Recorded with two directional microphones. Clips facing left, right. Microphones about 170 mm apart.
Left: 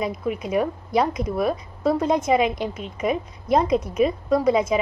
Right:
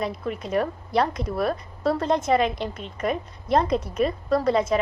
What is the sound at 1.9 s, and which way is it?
A woman's voice, 10° left (ahead or behind).